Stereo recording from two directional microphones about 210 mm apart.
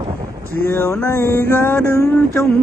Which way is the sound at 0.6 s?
10° left (ahead or behind).